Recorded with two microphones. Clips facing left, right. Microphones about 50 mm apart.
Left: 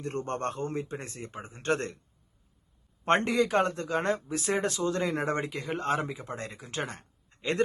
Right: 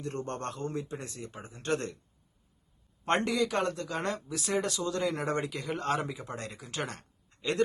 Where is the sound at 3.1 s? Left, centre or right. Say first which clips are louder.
Left 3 dB; left.